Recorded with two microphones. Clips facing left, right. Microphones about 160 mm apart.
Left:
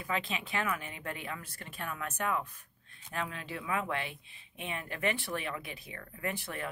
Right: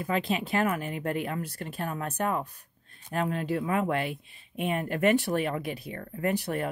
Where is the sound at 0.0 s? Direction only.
40° right (ahead or behind).